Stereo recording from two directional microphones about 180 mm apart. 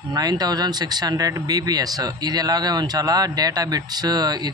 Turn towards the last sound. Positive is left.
turn(degrees=-20)  # may be behind; listen again after turning